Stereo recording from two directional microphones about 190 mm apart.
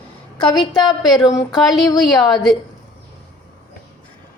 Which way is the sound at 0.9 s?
20° left (ahead or behind).